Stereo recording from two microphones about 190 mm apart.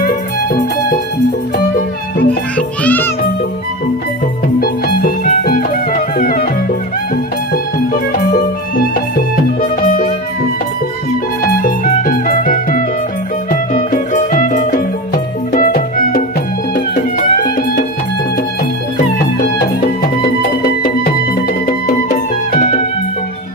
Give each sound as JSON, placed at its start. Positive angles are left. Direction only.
{"t": 1.5, "sound": "music", "side_deg": 50}
{"t": 2.6, "sound": "music", "side_deg": 10}
{"t": 4.6, "sound": "music", "side_deg": 50}
{"t": 7.5, "sound": "music", "side_deg": 50}
{"t": 11.6, "sound": "music", "side_deg": 50}
{"t": 20.8, "sound": "music", "side_deg": 50}